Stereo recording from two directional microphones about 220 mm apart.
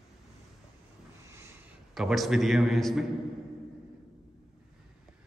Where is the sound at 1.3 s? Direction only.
10° right (ahead or behind).